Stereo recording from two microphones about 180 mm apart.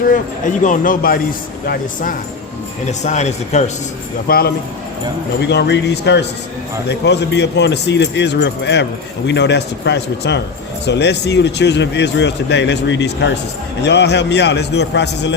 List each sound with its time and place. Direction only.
0.1 s speech: 45° left (ahead or behind)
2.8 s a man's voice: 40° left (ahead or behind)
4.3 s speech: 60° left (ahead or behind)
5.4 s speech: 70° left (ahead or behind)